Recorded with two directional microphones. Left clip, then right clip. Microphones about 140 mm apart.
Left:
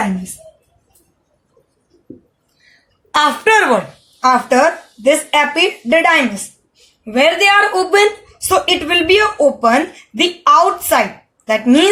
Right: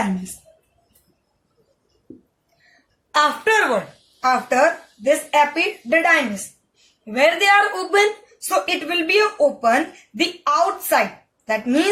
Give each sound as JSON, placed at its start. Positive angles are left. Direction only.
{"t": 3.1, "sound": "speech", "side_deg": 35}